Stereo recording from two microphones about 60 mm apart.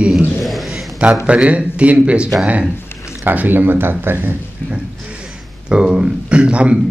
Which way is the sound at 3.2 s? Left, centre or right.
Right.